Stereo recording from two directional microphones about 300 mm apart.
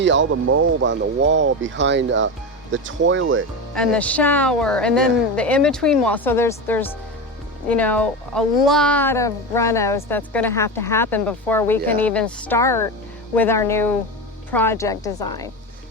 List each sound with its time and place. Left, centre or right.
0.0 s speech: right
3.8 s a woman's voice: centre